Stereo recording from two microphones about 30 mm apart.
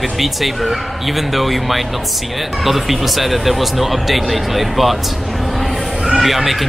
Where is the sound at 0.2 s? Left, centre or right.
Centre.